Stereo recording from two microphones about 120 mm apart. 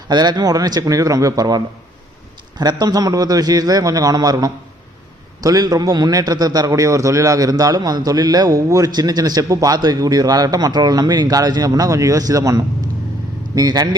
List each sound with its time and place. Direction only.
0.1 s a man's voice: 35° right (ahead or behind)